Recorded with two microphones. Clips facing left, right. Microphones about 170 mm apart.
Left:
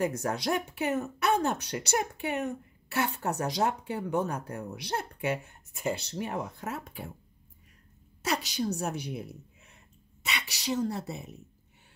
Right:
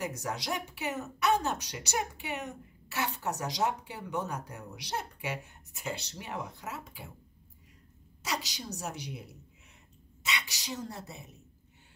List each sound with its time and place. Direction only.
0.0 s speech: 50° left (ahead or behind)
8.2 s speech: 55° left (ahead or behind)
10.2 s speech: 60° left (ahead or behind)